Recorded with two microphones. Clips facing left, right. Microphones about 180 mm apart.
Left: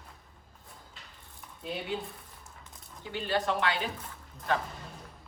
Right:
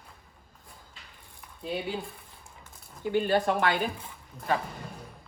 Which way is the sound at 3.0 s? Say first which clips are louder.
Right 7 dB; 50° right (ahead or behind).